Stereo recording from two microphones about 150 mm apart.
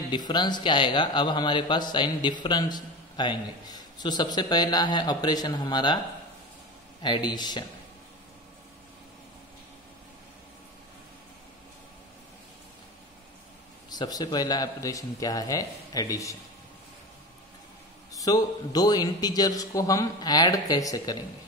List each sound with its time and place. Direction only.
0.1 s a man's voice: 30° left (ahead or behind)
7.0 s a man's voice: 30° left (ahead or behind)
13.8 s a man's voice: 25° left (ahead or behind)
18.1 s a man's voice: 25° left (ahead or behind)